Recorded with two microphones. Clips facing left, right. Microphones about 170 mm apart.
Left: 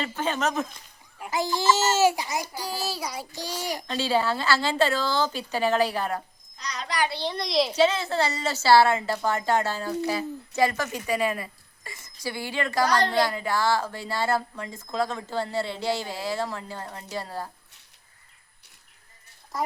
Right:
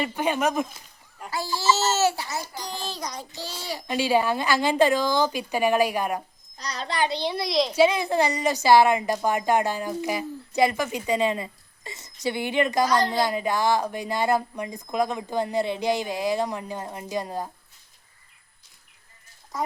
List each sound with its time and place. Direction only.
0.0 s speech: 15° right (ahead or behind)
1.3 s a child's voice: 20° left (ahead or behind)
3.8 s speech: 15° right (ahead or behind)
6.6 s speech: 35° right (ahead or behind); by 7.8 s centre (ahead or behind)
7.8 s speech: 15° right (ahead or behind)
19.5 s a child's voice: centre (ahead or behind)